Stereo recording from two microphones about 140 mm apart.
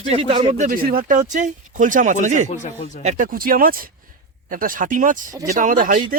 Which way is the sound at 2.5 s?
60° left (ahead or behind).